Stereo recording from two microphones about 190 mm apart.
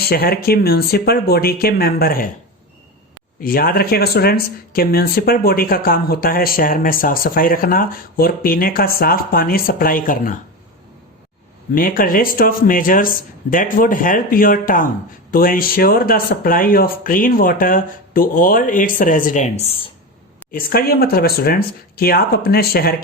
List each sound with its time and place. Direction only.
0.0 s speech: 55° left (ahead or behind)
3.4 s speech: 50° left (ahead or behind)
11.7 s speech: 50° left (ahead or behind); by 19.9 s 30° left (ahead or behind)
20.5 s speech: 50° left (ahead or behind)